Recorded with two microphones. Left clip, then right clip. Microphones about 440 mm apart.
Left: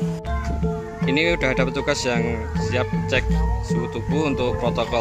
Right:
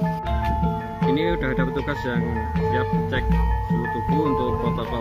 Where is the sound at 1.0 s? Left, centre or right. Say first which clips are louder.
Left 2 dB; left.